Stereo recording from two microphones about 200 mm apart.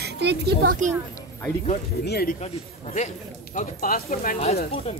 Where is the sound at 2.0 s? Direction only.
50° left (ahead or behind).